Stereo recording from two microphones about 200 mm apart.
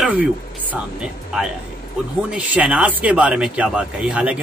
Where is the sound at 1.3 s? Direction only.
5° right (ahead or behind).